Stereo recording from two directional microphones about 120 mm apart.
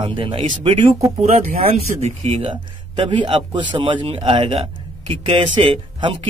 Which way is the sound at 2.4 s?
45° right (ahead or behind).